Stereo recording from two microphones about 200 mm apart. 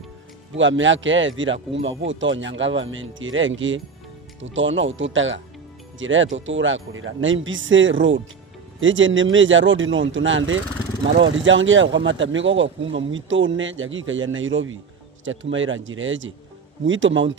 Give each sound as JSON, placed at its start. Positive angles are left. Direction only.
{"t": 0.5, "sound": "speech", "side_deg": -70}